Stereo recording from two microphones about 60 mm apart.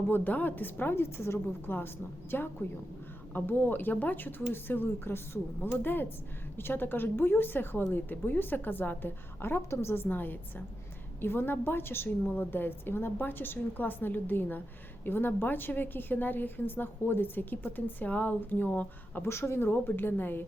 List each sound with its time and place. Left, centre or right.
0.1 s a woman's voice: left
9.6 s a woman's voice: left
19.2 s a woman's voice: left